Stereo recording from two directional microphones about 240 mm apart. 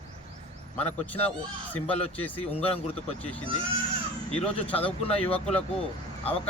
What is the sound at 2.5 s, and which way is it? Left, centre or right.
Speech, left.